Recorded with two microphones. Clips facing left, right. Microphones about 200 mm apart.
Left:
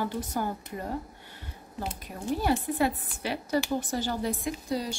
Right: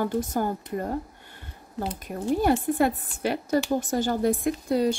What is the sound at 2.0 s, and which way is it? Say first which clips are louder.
A woman's voice: right 6 dB; 50° right (ahead or behind).